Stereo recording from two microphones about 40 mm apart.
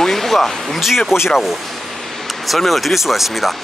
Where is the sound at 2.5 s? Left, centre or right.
Centre.